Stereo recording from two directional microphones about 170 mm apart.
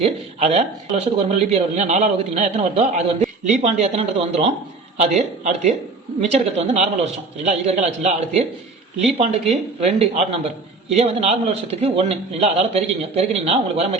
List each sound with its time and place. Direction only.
0.0 s a man's voice: 40° right (ahead or behind)